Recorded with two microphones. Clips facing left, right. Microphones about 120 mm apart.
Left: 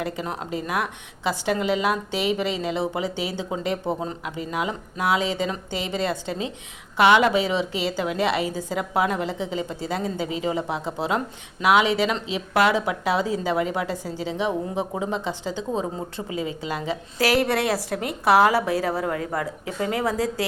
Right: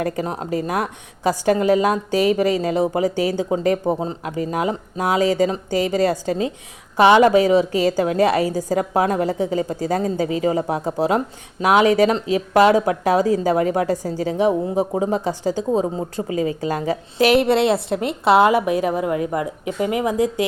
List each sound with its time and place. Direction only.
0.0 s a woman's voice: 40° right (ahead or behind)
17.2 s a woman's voice: 20° right (ahead or behind)